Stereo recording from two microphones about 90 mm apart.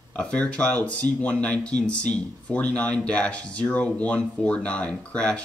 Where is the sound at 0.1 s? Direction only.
15° left (ahead or behind).